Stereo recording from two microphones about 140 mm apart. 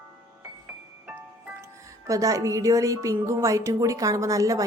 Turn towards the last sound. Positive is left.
turn(degrees=-25)  # may be behind; listen again after turning